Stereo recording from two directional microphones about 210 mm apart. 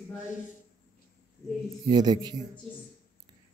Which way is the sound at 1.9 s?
20° right (ahead or behind).